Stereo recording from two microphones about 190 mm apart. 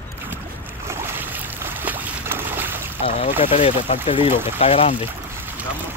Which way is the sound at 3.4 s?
30° left (ahead or behind).